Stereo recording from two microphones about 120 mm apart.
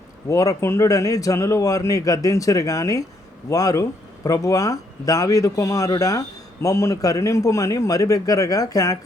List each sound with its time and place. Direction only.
0.3 s speech: 25° left (ahead or behind)